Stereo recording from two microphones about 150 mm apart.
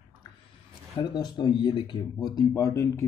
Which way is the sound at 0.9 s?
30° left (ahead or behind).